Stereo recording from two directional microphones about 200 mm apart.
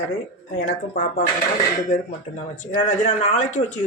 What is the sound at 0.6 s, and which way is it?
Speech, 45° left (ahead or behind).